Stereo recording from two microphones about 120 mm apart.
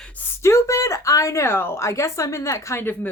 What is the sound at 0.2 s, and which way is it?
Speech, 25° left (ahead or behind).